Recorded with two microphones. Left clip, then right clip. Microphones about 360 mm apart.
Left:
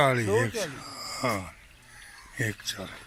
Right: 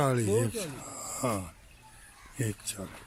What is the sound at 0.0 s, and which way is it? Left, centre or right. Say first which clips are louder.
Speech: left 4 dB; centre.